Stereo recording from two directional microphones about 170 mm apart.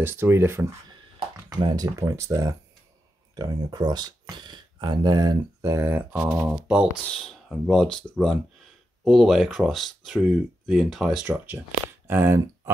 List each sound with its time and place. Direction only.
0.0 s speech: 15° right (ahead or behind)